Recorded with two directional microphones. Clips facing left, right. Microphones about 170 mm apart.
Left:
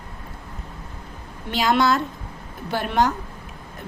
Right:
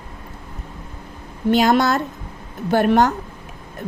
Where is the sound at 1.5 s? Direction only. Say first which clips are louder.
Right 4 dB; 45° right (ahead or behind).